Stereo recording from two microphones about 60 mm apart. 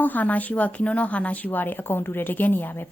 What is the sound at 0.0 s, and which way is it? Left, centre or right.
A woman's voice, left.